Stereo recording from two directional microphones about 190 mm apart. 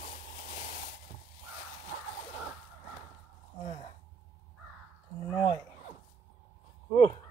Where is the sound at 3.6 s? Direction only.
35° left (ahead or behind).